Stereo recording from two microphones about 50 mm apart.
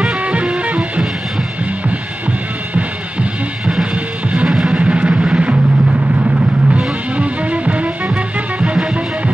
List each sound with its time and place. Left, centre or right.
0.0 s music: right
2.7 s music: right